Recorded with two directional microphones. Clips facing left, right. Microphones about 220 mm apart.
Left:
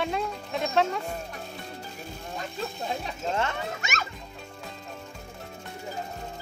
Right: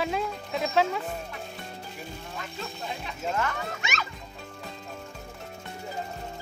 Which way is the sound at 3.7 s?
45° left (ahead or behind).